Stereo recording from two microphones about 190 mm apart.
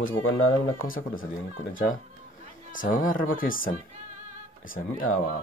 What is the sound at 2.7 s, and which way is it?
Speech, 45° left (ahead or behind).